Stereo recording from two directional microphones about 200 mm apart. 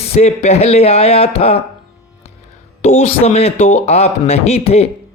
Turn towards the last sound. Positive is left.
turn(degrees=30)  # may be behind; listen again after turning